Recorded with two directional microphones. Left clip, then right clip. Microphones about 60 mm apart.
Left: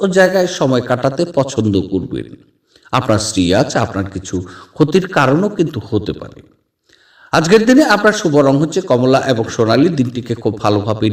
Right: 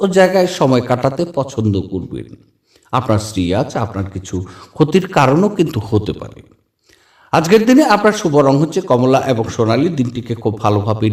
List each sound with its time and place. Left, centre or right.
0.0 s a man's voice: centre
1.4 s a man's voice: left
4.1 s a man's voice: left
4.9 s a man's voice: centre; by 9.6 s left
9.6 s a man's voice: left
9.9 s a man's voice: left